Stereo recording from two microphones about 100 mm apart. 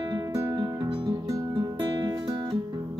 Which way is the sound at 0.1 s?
40° right (ahead or behind).